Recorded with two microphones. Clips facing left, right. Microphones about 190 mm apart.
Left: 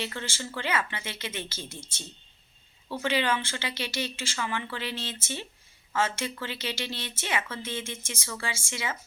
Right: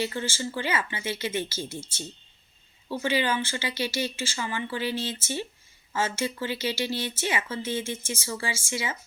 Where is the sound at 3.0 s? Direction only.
65° left (ahead or behind).